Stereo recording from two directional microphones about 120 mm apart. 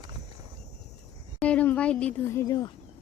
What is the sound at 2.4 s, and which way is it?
Speech, 35° left (ahead or behind).